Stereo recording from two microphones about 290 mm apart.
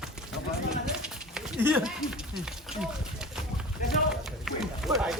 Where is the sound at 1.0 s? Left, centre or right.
Centre.